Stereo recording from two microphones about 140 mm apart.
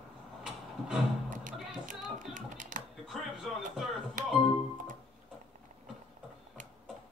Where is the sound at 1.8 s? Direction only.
65° right (ahead or behind).